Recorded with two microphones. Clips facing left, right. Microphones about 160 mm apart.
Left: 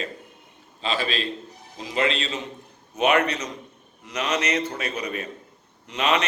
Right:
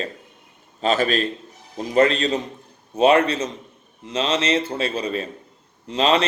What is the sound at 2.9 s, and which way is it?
A man's voice, 30° right (ahead or behind).